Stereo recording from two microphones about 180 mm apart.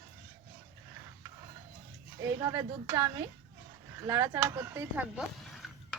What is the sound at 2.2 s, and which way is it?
Speech, 15° right (ahead or behind).